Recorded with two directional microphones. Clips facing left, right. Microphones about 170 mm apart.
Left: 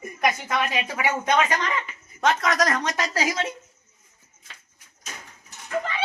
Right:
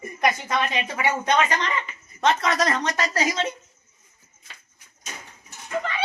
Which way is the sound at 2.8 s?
10° left (ahead or behind).